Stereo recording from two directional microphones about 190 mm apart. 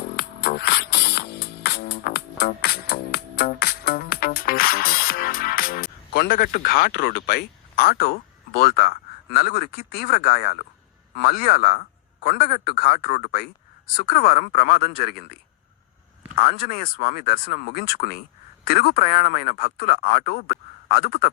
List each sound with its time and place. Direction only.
0.2 s music: 55° left (ahead or behind)
11.1 s speech: 55° left (ahead or behind)
16.4 s speech: 50° left (ahead or behind)